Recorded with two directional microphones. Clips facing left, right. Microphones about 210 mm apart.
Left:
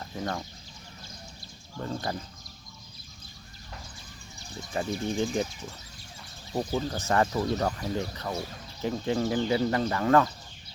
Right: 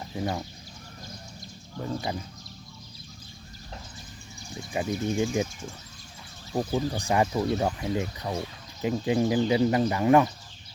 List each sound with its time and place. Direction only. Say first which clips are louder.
0.0 s speech: right 3 dB; 10° right (ahead or behind)
1.8 s speech: right 1 dB; 10° right (ahead or behind)
4.7 s speech: right 2 dB; 10° right (ahead or behind)
6.6 s speech: right 2 dB; 15° right (ahead or behind)